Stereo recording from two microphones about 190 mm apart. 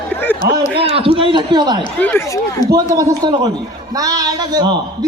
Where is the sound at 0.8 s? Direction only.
30° right (ahead or behind).